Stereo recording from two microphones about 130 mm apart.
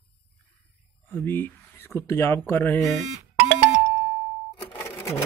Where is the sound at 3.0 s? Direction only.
65° right (ahead or behind).